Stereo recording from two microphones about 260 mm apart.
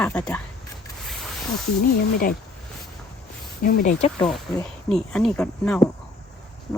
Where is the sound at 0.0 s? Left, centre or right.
Centre.